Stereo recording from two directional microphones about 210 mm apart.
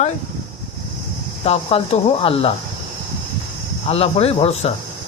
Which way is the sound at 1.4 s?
25° left (ahead or behind).